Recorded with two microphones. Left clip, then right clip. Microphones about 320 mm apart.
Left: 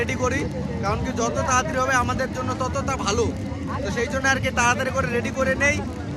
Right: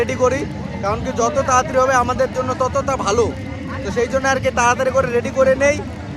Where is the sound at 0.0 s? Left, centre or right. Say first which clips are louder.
Right 7 dB; centre.